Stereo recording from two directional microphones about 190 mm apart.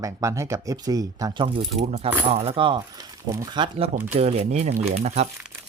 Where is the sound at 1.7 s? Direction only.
35° right (ahead or behind).